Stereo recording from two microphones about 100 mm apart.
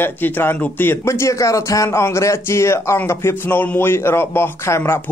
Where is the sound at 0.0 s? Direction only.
20° left (ahead or behind).